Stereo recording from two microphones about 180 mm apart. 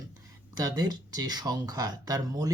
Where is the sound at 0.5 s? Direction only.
20° right (ahead or behind).